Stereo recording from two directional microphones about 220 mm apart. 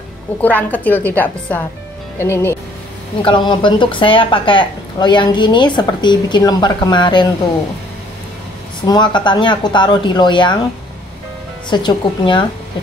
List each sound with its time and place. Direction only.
0.4 s a woman's voice: 5° left (ahead or behind)
8.8 s speech: 20° left (ahead or behind)
11.7 s speech: 20° left (ahead or behind)